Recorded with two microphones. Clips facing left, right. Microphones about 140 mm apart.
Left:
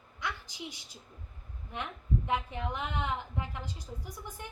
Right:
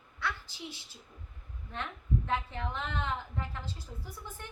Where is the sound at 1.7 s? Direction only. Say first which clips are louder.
Even; 15° left (ahead or behind).